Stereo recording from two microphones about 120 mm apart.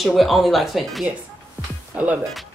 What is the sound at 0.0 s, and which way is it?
A woman's voice, centre (ahead or behind).